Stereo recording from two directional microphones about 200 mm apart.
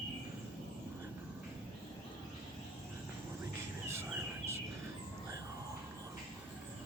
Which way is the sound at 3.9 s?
15° right (ahead or behind).